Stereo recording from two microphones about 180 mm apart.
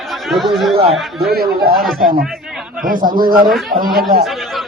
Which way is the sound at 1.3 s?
60° right (ahead or behind).